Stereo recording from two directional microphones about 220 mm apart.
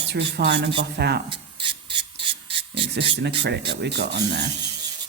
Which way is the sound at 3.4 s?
50° right (ahead or behind).